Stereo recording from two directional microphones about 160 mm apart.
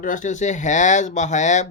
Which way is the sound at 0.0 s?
50° left (ahead or behind).